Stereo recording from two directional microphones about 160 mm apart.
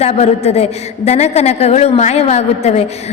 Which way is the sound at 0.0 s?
40° left (ahead or behind).